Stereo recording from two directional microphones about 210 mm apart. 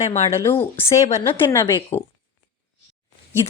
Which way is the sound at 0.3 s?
10° left (ahead or behind).